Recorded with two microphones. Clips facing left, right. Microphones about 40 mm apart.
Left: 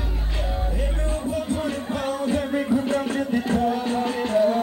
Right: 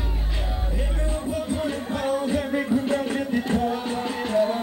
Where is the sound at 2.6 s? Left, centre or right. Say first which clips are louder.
Left 1 dB; centre.